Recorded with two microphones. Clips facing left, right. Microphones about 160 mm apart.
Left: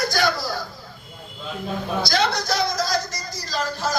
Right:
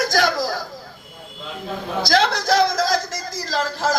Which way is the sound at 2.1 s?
90° right.